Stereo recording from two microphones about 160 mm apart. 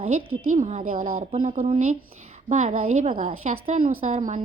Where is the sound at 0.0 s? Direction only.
50° right (ahead or behind).